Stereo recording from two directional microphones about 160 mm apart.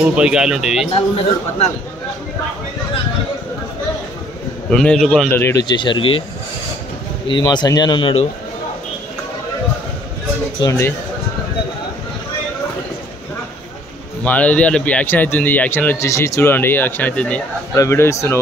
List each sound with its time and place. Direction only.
0.0 s speech: 5° right (ahead or behind)
4.6 s speech: 5° left (ahead or behind)
5.3 s speech: 15° left (ahead or behind); by 6.2 s 30° left (ahead or behind)
7.2 s speech: 30° left (ahead or behind)
10.6 s speech: 20° left (ahead or behind)
14.2 s speech: 10° left (ahead or behind)